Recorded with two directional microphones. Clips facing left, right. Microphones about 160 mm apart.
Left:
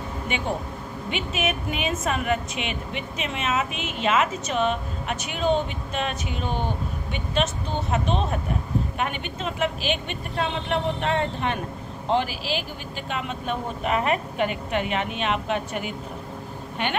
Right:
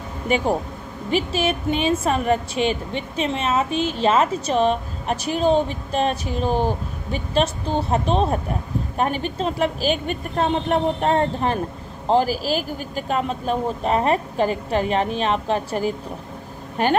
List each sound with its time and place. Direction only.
0.3 s a woman's voice: 40° right (ahead or behind)